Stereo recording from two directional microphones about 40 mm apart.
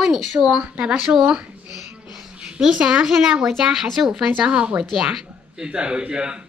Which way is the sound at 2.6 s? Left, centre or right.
Centre.